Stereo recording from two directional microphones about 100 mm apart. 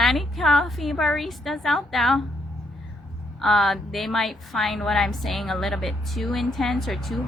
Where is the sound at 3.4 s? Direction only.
Centre (ahead or behind).